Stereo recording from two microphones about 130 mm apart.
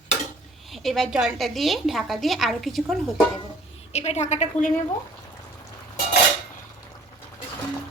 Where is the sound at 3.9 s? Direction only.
55° left (ahead or behind).